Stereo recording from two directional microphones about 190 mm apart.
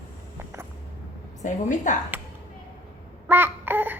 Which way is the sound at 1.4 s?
40° left (ahead or behind).